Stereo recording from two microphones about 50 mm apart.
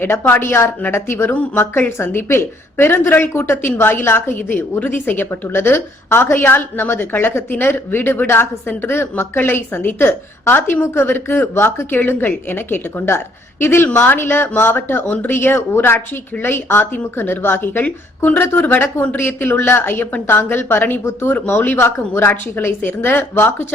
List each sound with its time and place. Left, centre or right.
0.0 s a woman's voice: left
0.9 s speech: left
1.3 s a woman's voice: left
6.3 s a woman's voice: left
21.3 s speech: left
21.8 s speech: left
22.3 s a woman's voice: left